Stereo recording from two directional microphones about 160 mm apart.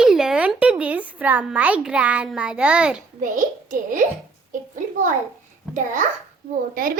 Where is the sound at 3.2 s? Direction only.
55° right (ahead or behind).